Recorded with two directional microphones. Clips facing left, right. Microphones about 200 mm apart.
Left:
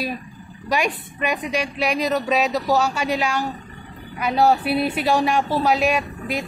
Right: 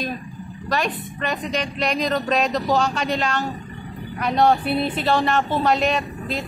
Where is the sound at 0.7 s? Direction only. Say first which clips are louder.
Left 1 dB; 10° left (ahead or behind).